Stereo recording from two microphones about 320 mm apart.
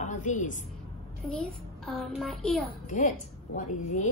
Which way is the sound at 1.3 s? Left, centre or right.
Centre.